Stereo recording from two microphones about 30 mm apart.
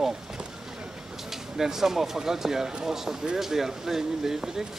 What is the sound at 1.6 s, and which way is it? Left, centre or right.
Speech, centre.